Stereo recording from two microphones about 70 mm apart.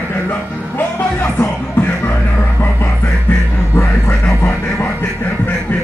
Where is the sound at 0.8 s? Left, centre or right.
Left.